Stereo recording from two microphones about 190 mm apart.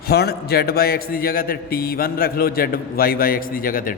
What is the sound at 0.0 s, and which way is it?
A man's voice, 55° left (ahead or behind).